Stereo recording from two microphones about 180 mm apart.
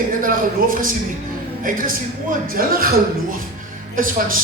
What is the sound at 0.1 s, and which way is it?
Speech, 50° right (ahead or behind).